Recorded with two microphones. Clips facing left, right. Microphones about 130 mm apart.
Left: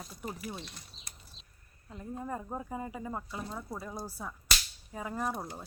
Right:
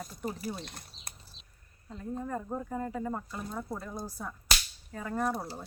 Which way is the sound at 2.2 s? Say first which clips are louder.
Right 1 dB; 10° left (ahead or behind).